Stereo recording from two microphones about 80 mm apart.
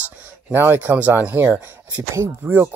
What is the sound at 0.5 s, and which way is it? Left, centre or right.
Speech, right.